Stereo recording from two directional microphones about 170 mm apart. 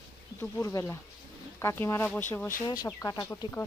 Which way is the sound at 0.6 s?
20° left (ahead or behind).